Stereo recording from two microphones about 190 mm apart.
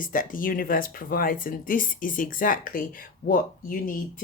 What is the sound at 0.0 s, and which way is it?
Speech, 45° left (ahead or behind).